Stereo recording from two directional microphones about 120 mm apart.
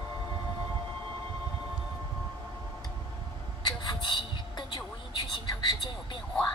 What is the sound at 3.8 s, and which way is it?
Music, 40° left (ahead or behind).